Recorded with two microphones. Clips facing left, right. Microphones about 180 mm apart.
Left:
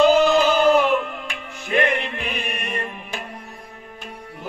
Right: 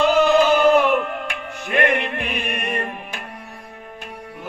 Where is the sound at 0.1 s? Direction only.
55° right (ahead or behind).